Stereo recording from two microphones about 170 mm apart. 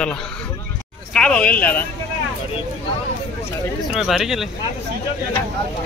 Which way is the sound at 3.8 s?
5° right (ahead or behind).